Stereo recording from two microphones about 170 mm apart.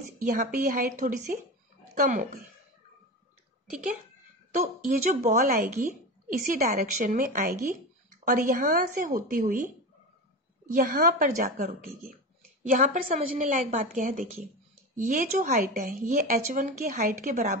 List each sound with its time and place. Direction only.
0.2 s speech: 50° right (ahead or behind)
4.6 s speech: 50° right (ahead or behind)
10.7 s speech: 50° right (ahead or behind)